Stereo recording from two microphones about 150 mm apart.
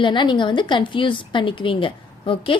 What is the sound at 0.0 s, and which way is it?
A woman's voice, 30° left (ahead or behind).